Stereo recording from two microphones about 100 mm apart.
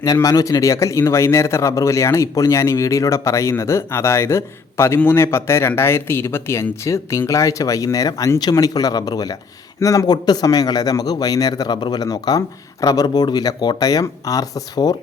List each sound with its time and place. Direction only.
0.0 s a man's voice: 35° left (ahead or behind)